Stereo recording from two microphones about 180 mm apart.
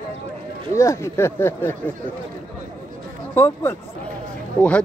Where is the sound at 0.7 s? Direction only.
15° left (ahead or behind).